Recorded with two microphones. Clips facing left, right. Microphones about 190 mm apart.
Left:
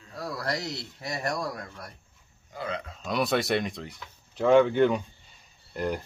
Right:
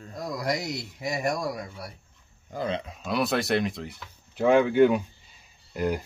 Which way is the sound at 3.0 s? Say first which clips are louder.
Left 1 dB; centre (ahead or behind).